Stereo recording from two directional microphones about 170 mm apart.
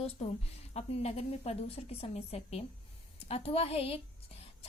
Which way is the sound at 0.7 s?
40° left (ahead or behind).